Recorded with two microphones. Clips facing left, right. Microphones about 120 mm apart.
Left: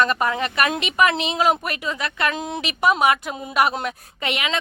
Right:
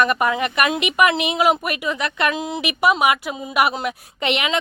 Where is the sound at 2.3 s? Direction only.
5° right (ahead or behind).